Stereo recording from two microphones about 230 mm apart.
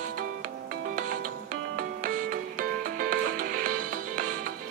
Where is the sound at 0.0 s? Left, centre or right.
Right.